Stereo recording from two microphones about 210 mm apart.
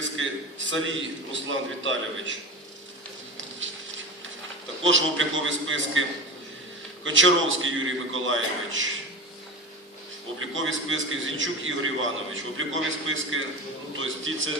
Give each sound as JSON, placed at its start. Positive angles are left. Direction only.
{"t": 0.7, "sound": "a man's voice", "side_deg": -65}
{"t": 3.6, "sound": "a sound", "side_deg": -65}
{"t": 4.8, "sound": "a man's voice", "side_deg": -65}
{"t": 10.4, "sound": "a man's voice", "side_deg": -65}